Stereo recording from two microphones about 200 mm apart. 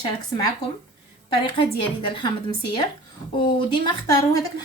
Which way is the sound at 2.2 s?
20° left (ahead or behind).